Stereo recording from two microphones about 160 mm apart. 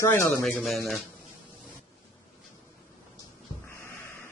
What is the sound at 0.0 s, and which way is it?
Speech, 15° left (ahead or behind).